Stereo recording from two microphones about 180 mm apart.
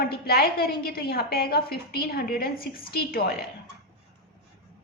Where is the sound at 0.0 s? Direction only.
60° left (ahead or behind).